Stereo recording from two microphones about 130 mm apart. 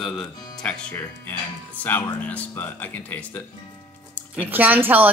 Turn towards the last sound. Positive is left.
turn(degrees=-15)  # may be behind; listen again after turning